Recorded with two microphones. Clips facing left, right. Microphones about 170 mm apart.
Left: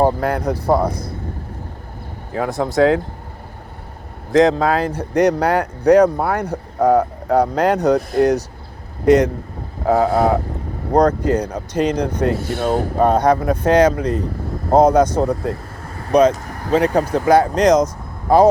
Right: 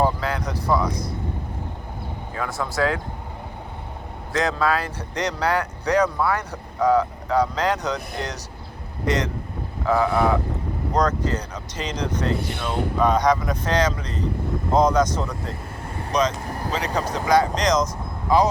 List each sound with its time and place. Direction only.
0.0 s speech: 55° left (ahead or behind)
2.3 s speech: 50° left (ahead or behind)
4.3 s speech: 55° left (ahead or behind)